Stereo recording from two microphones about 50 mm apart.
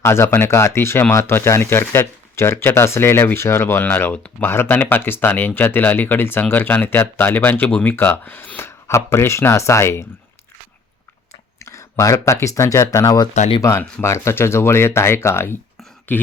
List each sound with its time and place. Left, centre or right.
0.0 s speech: left
1.3 s speech: left
6.4 s speech: left
8.9 s speech: left
11.6 s speech: left
16.1 s speech: left